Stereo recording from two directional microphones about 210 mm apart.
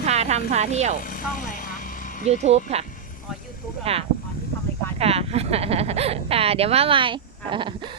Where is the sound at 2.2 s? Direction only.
30° right (ahead or behind).